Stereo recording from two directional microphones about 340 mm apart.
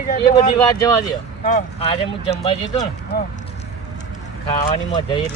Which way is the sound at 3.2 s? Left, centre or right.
Left.